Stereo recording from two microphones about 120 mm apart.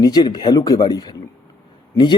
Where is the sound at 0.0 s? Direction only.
35° left (ahead or behind).